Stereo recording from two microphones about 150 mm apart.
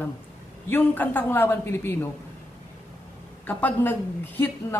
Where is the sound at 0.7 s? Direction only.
10° left (ahead or behind).